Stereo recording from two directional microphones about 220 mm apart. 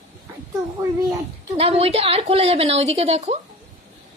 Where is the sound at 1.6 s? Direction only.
25° right (ahead or behind).